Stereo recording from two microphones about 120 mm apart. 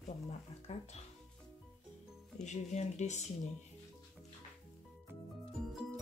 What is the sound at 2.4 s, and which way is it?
Speech, 75° left (ahead or behind).